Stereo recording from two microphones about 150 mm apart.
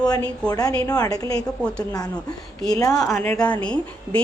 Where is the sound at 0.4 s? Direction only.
25° left (ahead or behind).